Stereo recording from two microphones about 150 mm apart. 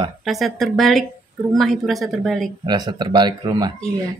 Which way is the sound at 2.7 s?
30° right (ahead or behind).